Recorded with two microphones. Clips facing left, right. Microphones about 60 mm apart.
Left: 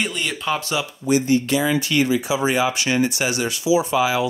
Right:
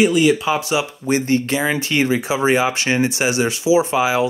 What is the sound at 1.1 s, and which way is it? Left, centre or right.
Speech, right.